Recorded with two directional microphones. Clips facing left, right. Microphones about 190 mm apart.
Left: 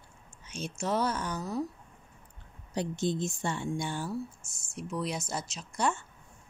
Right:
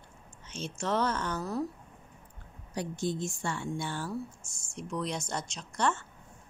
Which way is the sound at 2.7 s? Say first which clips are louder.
Left 2 dB; 25° left (ahead or behind).